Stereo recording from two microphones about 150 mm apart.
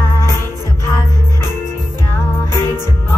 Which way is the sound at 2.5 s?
25° right (ahead or behind).